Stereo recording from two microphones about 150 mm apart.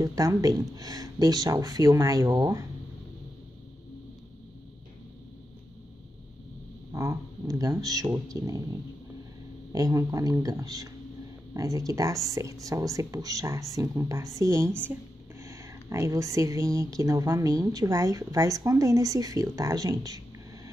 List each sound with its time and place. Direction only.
0.0 s speech: 25° right (ahead or behind)
6.9 s speech: 20° right (ahead or behind)
9.7 s speech: 20° right (ahead or behind)